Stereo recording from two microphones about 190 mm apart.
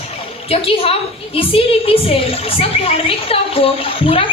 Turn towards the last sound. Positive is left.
turn(degrees=30)  # may be behind; listen again after turning